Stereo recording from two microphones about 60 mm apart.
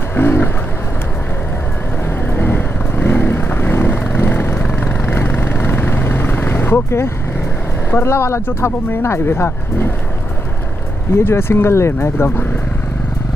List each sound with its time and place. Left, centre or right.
0.1 s a sound: left
2.0 s vehicle: left
7.9 s speech: left
11.1 s speech: left